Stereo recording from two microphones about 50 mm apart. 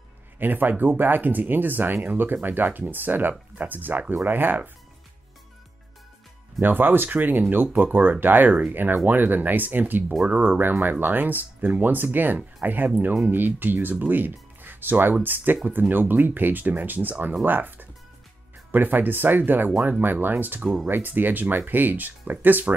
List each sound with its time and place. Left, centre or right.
0.4 s speech: right
6.6 s speech: right